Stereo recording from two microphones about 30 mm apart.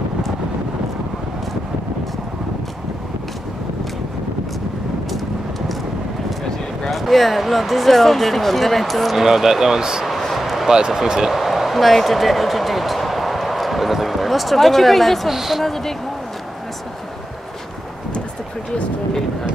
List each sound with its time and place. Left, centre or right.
6.9 s speech: centre
9.2 s speech: centre
10.3 s basketball bounce: centre
10.9 s speech: centre
11.3 s a sound: centre
15.2 s speech: centre
15.6 s speech: centre